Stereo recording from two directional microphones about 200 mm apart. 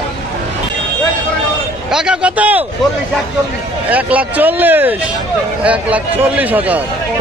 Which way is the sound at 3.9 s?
5° right (ahead or behind).